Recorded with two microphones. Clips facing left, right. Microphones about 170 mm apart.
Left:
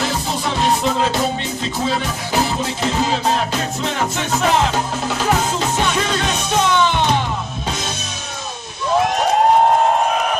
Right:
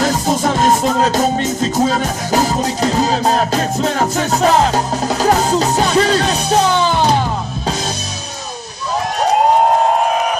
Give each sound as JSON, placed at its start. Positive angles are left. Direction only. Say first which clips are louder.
{"t": 0.0, "sound": "music", "louder": "right 6 dB", "side_deg": -45}